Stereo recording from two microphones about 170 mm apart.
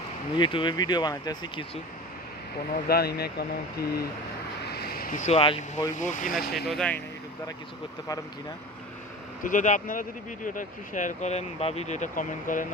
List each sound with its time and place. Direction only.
0.3 s speech: 30° left (ahead or behind)
2.7 s speech: 65° left (ahead or behind)
4.6 s vehicle: 70° left (ahead or behind)
5.1 s speech: 40° left (ahead or behind)
5.9 s speech: 45° left (ahead or behind); by 6.7 s 65° left (ahead or behind)
6.7 s speech: 5° left (ahead or behind)
9.4 s speech: 50° left (ahead or behind)